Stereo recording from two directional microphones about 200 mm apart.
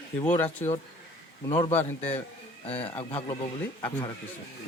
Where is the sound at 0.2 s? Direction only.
10° left (ahead or behind).